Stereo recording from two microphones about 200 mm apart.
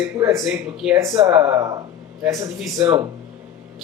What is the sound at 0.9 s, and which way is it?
Speech, 15° right (ahead or behind).